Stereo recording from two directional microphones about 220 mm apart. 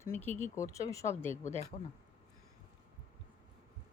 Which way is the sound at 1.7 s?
25° left (ahead or behind).